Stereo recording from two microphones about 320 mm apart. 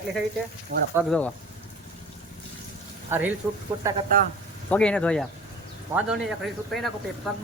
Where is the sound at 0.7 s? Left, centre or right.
Right.